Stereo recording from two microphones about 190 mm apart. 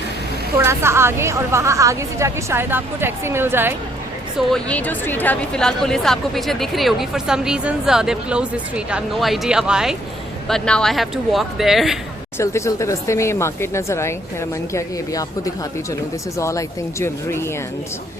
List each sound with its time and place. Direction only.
0.5 s a woman's voice: 15° right (ahead or behind)
4.4 s a woman's voice: 5° left (ahead or behind)
12.4 s speech: 15° left (ahead or behind)